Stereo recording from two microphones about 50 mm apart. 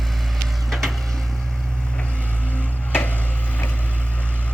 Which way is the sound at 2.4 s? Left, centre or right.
Left.